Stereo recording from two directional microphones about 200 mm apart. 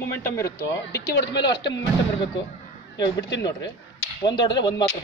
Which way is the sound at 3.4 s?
20° left (ahead or behind).